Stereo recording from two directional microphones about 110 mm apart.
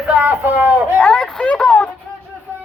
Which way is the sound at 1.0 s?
5° left (ahead or behind).